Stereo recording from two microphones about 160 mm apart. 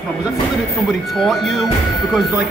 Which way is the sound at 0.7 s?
Centre (ahead or behind).